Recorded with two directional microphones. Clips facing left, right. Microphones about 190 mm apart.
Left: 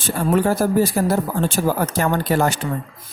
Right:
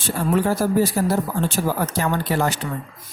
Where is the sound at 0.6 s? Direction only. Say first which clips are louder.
Left 2 dB; 50° left (ahead or behind).